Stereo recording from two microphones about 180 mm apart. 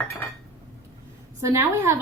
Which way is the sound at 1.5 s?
15° right (ahead or behind).